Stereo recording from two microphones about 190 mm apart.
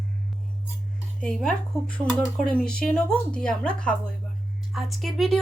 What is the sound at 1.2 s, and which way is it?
Speech, 5° left (ahead or behind).